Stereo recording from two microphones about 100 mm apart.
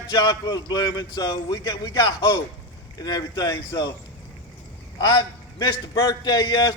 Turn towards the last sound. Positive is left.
turn(degrees=40)  # may be behind; listen again after turning